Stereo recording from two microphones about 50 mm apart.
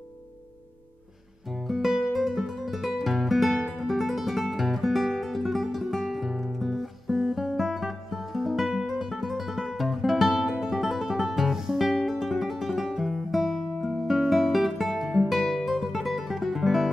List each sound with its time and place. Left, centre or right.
1.5 s music: centre
2.0 s guitar: centre
12.1 s music: centre
14.0 s guitar: centre